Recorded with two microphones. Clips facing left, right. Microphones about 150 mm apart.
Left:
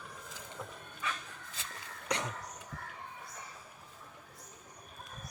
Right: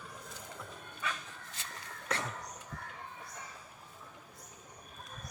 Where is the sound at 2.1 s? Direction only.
20° left (ahead or behind).